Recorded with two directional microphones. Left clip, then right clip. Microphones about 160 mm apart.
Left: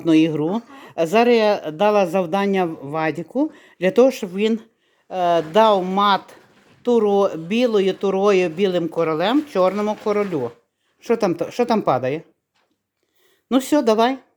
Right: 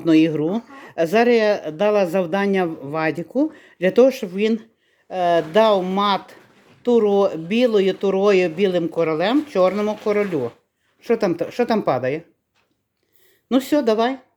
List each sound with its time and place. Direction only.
0.0 s speech: 5° left (ahead or behind)
11.0 s speech: 15° left (ahead or behind)
13.5 s speech: 10° left (ahead or behind)